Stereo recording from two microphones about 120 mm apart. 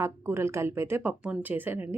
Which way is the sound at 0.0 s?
20° right (ahead or behind).